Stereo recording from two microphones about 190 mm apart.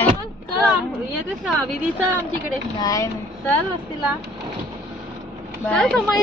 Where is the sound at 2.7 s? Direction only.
20° left (ahead or behind).